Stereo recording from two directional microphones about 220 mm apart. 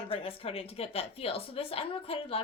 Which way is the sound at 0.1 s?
25° left (ahead or behind).